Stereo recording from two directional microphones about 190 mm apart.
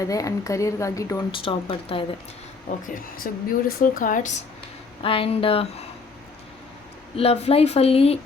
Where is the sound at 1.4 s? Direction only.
30° left (ahead or behind).